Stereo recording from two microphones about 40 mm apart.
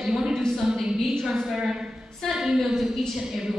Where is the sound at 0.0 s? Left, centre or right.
Centre.